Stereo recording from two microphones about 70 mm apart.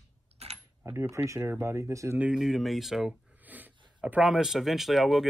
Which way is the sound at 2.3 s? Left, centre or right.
Centre.